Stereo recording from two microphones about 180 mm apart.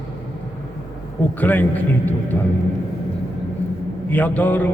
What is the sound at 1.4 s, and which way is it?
Speech, 10° left (ahead or behind).